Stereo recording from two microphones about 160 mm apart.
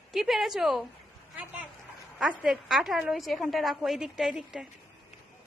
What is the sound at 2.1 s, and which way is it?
A woman's voice, 5° right (ahead or behind).